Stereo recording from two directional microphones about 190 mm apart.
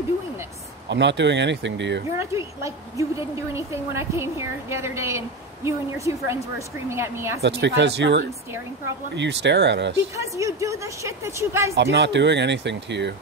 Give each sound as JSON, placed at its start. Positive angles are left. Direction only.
{"t": 0.8, "sound": "speech", "side_deg": -70}
{"t": 2.1, "sound": "a woman's voice", "side_deg": -15}
{"t": 7.4, "sound": "speech", "side_deg": -65}
{"t": 10.1, "sound": "a woman's voice", "side_deg": -15}
{"t": 11.7, "sound": "speech", "side_deg": -60}